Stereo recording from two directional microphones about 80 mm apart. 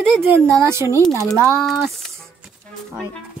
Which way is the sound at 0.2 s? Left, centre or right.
Right.